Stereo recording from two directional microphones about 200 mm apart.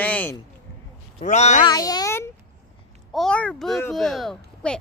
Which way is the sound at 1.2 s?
35° left (ahead or behind).